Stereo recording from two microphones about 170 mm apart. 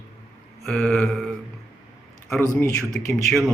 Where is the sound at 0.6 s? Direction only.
Centre (ahead or behind).